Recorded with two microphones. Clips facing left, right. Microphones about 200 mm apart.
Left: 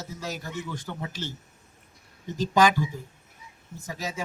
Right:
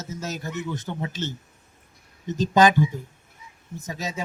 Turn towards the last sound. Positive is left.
turn(degrees=-20)  # may be behind; listen again after turning